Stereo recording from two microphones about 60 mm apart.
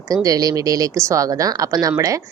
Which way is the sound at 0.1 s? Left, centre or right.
Right.